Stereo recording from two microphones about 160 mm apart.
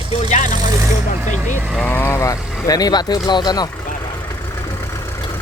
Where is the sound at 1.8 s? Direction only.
15° left (ahead or behind).